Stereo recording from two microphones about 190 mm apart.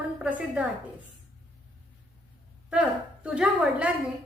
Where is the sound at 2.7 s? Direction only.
5° right (ahead or behind).